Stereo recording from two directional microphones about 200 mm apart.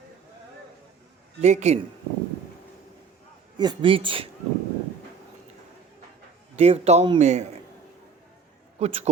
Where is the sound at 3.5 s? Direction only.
20° right (ahead or behind).